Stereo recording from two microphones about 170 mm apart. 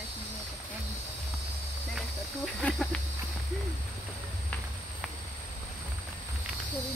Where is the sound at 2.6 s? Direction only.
5° left (ahead or behind).